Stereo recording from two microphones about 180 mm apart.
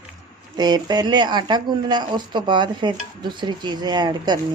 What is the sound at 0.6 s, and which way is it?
Speech, 25° right (ahead or behind).